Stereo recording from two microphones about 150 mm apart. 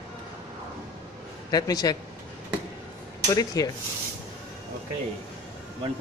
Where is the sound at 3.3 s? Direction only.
25° left (ahead or behind).